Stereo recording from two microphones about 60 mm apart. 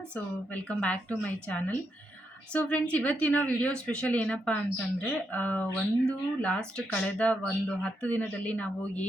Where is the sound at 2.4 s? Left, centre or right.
Left.